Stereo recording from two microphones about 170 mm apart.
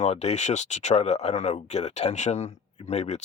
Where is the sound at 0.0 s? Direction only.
40° left (ahead or behind).